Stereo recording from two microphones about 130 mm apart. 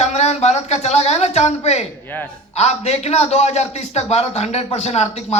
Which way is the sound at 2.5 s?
55° left (ahead or behind).